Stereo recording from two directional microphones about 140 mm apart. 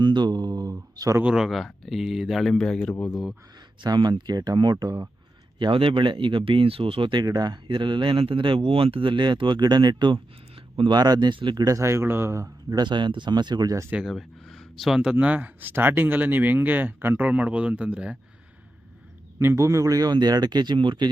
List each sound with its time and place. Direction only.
0.0 s speech: 30° right (ahead or behind)
1.2 s speech: 5° right (ahead or behind)
3.8 s speech: 35° right (ahead or behind)
13.9 s speech: 5° right (ahead or behind)
19.4 s speech: 20° right (ahead or behind)